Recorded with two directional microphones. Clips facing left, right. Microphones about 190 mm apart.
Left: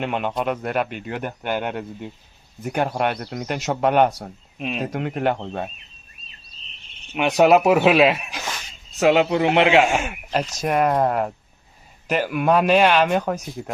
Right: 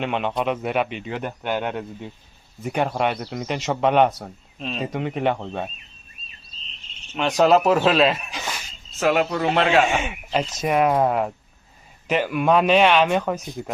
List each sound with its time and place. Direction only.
0.0 s speech: 5° left (ahead or behind)
7.1 s speech: 10° left (ahead or behind)
9.0 s a man's voice: 20° left (ahead or behind)
9.8 s speech: centre (ahead or behind)